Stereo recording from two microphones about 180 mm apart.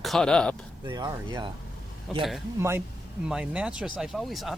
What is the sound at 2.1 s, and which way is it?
Speech, centre (ahead or behind).